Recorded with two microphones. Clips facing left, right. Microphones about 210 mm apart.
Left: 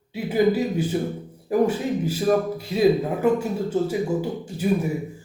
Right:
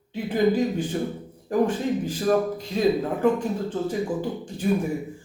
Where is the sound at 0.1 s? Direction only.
10° left (ahead or behind).